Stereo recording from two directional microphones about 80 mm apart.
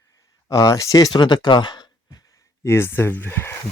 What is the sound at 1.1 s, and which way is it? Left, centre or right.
Speech, left.